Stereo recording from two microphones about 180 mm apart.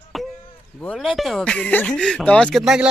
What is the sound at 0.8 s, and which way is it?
Speech, centre (ahead or behind).